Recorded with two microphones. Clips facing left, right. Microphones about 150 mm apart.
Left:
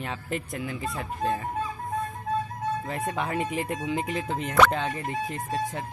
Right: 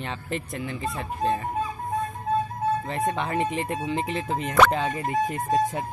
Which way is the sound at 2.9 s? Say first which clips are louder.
Right 3 dB; centre (ahead or behind).